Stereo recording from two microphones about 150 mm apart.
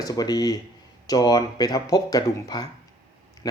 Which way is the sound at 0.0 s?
25° left (ahead or behind).